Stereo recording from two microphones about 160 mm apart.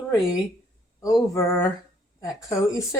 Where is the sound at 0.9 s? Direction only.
20° left (ahead or behind).